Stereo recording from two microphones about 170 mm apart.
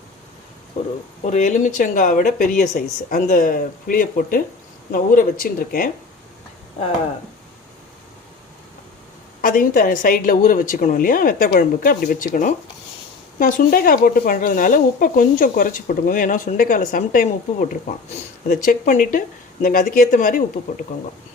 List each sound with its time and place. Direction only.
0.8 s speech: 30° left (ahead or behind)
1.2 s speech: 45° left (ahead or behind)
9.4 s speech: 55° left (ahead or behind)